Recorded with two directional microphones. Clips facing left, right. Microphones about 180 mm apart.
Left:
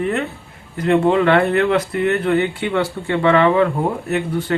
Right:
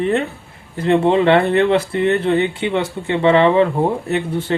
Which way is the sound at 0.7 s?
25° right (ahead or behind).